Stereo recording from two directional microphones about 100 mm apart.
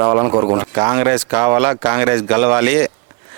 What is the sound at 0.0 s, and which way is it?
Speech, 35° right (ahead or behind).